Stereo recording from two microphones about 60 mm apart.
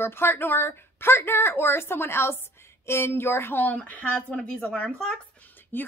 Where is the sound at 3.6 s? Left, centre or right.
Left.